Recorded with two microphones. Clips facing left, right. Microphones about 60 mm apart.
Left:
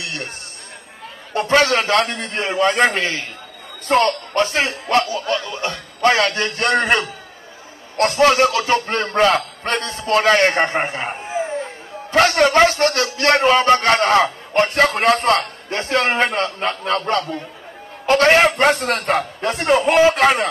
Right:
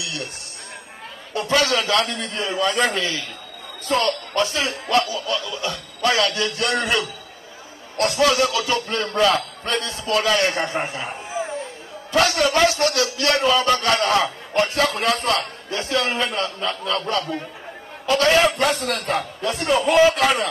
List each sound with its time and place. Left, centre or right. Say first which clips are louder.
0.0 s speech: left 2 dB; left
1.3 s a man's voice: left 4 dB; left